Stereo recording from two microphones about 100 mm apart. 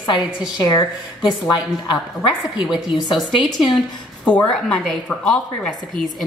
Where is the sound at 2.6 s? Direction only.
5° right (ahead or behind).